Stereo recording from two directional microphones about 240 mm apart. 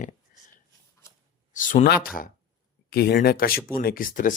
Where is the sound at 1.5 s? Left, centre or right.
Left.